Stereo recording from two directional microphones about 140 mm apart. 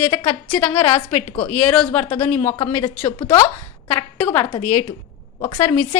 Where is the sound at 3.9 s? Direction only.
45° left (ahead or behind).